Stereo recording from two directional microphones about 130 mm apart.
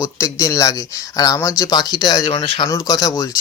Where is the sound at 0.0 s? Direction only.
20° left (ahead or behind).